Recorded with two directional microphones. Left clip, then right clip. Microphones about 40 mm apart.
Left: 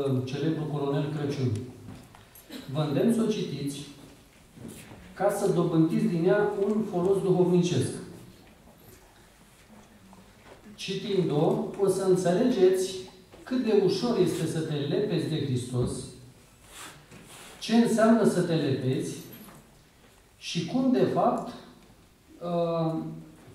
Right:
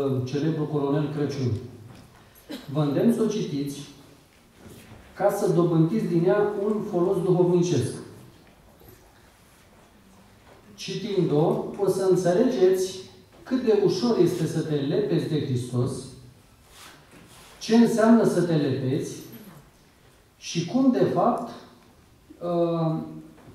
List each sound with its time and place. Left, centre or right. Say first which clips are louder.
0.3 s a man's voice: right 4 dB; centre
2.5 s a man's voice: right 3 dB; centre
4.6 s a sound: left 3 dB; right
5.1 s a man's voice: right 3 dB; centre
10.8 s a man's voice: right 2 dB; right
12.5 s a sound: right 2 dB; centre
13.9 s a man's voice: right 4 dB; centre
17.6 s a man's voice: right 3 dB; centre
20.4 s a man's voice: right 4 dB; centre